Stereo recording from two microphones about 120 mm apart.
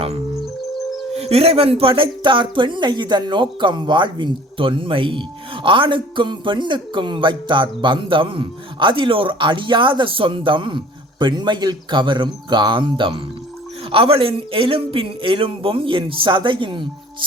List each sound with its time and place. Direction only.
0.7 s music: centre (ahead or behind)
1.1 s speech: 60° right (ahead or behind)